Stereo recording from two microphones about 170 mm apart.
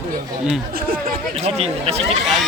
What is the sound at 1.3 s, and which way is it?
Speech, 35° right (ahead or behind).